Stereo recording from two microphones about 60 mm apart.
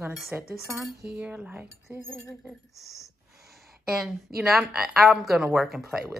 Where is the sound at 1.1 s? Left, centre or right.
Right.